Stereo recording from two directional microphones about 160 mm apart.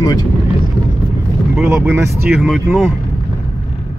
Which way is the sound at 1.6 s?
15° right (ahead or behind).